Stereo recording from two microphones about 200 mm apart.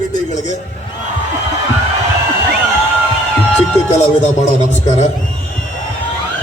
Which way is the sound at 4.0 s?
35° left (ahead or behind).